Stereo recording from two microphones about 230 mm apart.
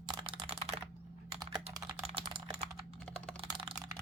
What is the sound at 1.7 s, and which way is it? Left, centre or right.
Typing, right.